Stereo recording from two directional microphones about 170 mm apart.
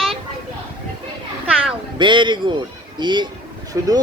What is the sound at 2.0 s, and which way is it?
Speech, 30° right (ahead or behind).